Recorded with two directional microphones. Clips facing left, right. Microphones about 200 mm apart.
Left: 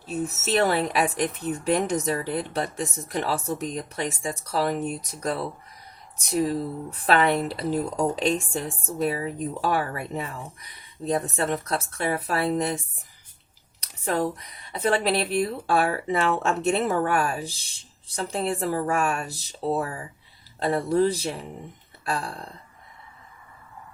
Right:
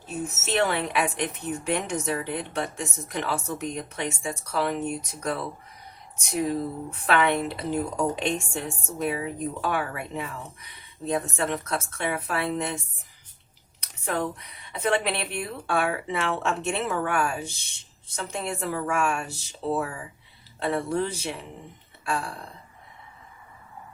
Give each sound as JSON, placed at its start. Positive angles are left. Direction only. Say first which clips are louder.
{"t": 0.4, "sound": "speech", "louder": "left 3 dB", "side_deg": 35}
{"t": 14.0, "sound": "speech", "louder": "left 3 dB", "side_deg": 35}
{"t": 22.0, "sound": "a sound", "louder": "even", "side_deg": 35}